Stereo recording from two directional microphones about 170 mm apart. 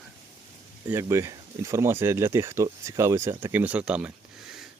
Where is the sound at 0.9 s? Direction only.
15° right (ahead or behind).